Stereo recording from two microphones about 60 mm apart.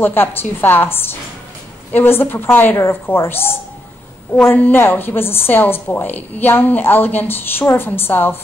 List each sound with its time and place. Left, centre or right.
0.0 s a woman's voice: left